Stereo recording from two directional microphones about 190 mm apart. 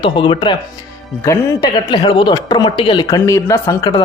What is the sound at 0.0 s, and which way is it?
Speech, 25° left (ahead or behind).